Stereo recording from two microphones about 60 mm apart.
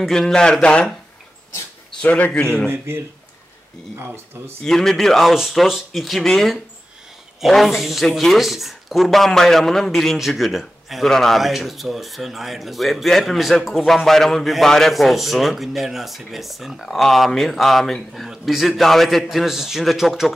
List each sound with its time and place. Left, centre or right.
0.1 s speech: centre
2.0 s a man's voice: left
4.0 s speech: right
4.6 s speech: centre